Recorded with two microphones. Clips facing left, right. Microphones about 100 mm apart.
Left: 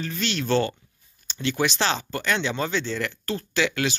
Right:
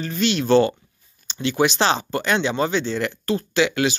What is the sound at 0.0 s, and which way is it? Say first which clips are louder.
Speech: right 6 dB; 10° right (ahead or behind).